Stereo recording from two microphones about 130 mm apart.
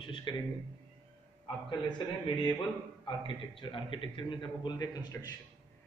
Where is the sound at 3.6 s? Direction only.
40° left (ahead or behind).